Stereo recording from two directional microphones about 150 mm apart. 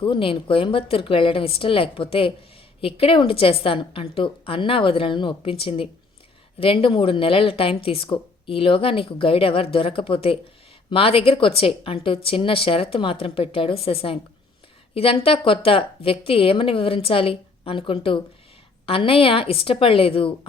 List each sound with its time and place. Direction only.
0.0 s a woman's voice: 35° left (ahead or behind)